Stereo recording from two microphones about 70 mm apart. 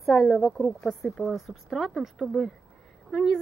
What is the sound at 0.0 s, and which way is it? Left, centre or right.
Speech, centre.